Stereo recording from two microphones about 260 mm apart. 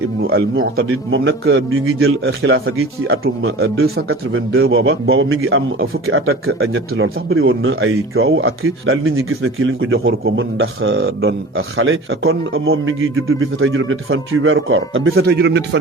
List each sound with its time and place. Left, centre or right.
0.3 s speech: right
3.2 s speech: right
4.1 s speech: right